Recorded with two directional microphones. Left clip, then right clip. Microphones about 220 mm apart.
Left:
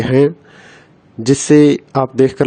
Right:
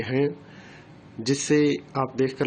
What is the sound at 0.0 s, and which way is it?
Speech, 50° left (ahead or behind).